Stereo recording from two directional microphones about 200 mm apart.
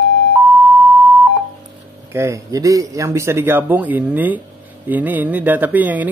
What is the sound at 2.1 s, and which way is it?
Speech, 15° right (ahead or behind).